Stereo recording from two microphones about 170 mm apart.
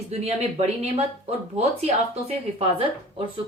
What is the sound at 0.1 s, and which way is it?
Speech, 40° right (ahead or behind).